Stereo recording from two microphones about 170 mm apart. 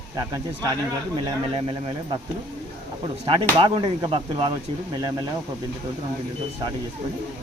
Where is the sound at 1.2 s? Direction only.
30° right (ahead or behind).